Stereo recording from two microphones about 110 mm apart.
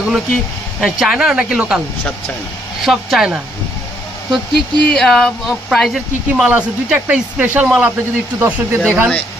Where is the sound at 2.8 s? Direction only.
Centre (ahead or behind).